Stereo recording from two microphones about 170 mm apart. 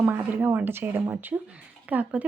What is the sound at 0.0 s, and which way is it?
Speech, 10° right (ahead or behind).